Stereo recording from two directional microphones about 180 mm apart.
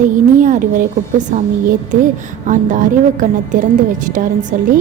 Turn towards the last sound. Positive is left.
turn(degrees=-45)  # may be behind; listen again after turning